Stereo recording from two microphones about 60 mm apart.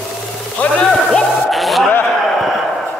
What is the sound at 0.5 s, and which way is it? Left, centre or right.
Speech, centre.